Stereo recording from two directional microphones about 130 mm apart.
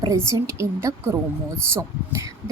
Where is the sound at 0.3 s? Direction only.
20° right (ahead or behind).